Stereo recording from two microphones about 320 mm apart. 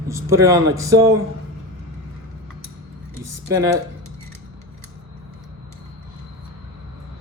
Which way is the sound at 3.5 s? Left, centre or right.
Centre.